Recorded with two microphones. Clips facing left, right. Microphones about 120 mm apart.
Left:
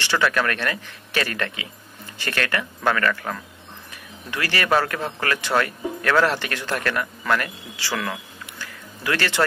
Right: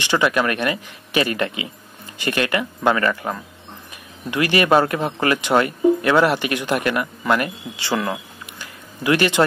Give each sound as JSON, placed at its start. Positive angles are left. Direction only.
{"t": 0.0, "sound": "speech", "side_deg": -15}